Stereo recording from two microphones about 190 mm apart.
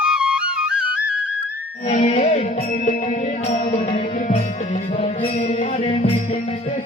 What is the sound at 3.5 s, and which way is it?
Music, 35° left (ahead or behind).